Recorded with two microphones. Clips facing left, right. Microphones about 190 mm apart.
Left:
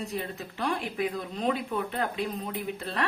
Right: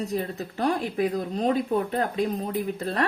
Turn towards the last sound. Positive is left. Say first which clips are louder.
# right 6 dB
turn(degrees=-45)  # may be behind; listen again after turning